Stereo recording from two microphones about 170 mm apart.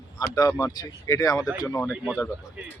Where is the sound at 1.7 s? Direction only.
Centre (ahead or behind).